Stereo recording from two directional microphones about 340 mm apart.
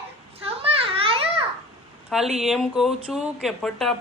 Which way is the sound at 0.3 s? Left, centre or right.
Centre.